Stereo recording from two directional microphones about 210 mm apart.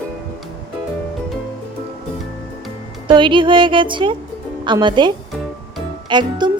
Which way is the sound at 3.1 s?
25° right (ahead or behind).